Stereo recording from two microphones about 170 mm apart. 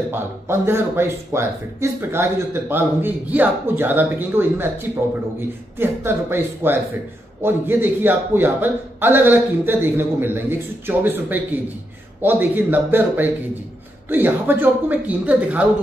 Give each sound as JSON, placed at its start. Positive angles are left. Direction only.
{"t": 0.1, "sound": "speech", "side_deg": -15}